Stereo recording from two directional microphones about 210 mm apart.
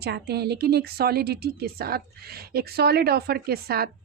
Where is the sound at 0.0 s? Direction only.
50° right (ahead or behind).